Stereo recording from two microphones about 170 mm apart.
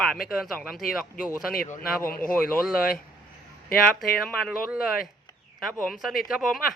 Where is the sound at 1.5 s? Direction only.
45° left (ahead or behind).